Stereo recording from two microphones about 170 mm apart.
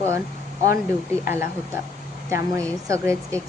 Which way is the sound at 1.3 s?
15° right (ahead or behind).